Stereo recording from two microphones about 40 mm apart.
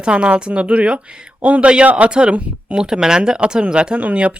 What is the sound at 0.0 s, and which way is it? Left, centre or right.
A man's voice, right.